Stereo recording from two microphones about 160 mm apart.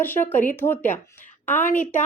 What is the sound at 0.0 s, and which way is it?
A woman's voice, 10° left (ahead or behind).